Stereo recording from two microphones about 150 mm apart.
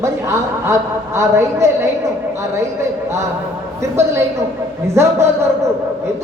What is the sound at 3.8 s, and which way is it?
A woman's voice, 20° right (ahead or behind).